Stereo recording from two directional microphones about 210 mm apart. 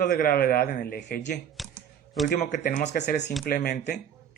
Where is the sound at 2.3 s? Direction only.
35° left (ahead or behind).